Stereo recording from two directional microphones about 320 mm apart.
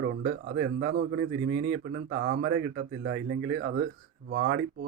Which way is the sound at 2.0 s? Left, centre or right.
Right.